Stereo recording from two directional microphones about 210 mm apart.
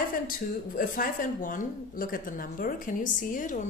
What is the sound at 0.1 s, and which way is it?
A woman's voice, 40° left (ahead or behind).